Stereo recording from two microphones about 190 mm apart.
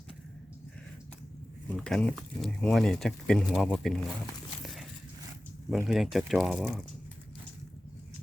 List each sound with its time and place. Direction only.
1.7 s speech: 5° left (ahead or behind)
4.6 s dog: centre (ahead or behind)
5.7 s speech: centre (ahead or behind)